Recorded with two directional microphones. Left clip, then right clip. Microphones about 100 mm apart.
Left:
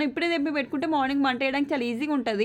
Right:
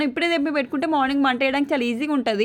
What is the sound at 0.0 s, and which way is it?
A woman's voice, 30° right (ahead or behind).